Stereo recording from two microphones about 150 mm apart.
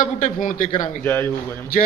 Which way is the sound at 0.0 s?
55° left (ahead or behind).